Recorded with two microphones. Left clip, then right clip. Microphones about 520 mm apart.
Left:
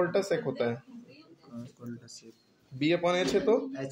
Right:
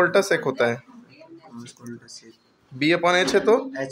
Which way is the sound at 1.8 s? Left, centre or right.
Left.